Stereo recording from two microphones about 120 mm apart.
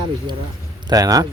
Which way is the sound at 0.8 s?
30° right (ahead or behind).